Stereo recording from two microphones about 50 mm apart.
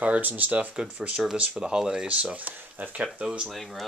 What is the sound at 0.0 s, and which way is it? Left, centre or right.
Speech, right.